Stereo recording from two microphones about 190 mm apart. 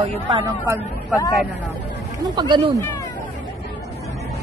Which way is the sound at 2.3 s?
25° right (ahead or behind).